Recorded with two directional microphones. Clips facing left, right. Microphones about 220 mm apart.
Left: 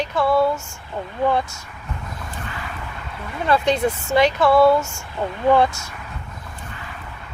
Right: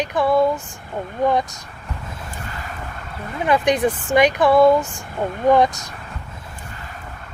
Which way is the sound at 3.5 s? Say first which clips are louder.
Right 1 dB; 15° right (ahead or behind).